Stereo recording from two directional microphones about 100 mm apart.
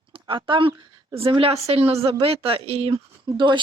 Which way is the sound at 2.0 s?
75° right (ahead or behind).